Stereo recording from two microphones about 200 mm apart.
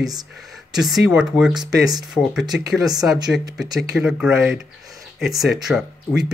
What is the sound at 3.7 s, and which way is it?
Speech, centre (ahead or behind).